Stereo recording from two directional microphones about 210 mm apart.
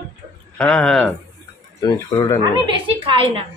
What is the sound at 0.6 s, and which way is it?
Speech, 5° left (ahead or behind).